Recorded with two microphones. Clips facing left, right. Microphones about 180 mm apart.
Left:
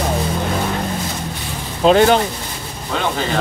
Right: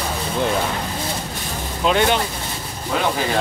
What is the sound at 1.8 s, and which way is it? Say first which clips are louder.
Speech: left 6 dB; 35° left (ahead or behind).